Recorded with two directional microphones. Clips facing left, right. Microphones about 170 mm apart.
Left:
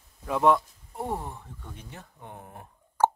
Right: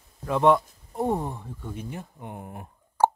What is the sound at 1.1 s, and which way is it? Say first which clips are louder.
Speech: right 6 dB; 20° right (ahead or behind).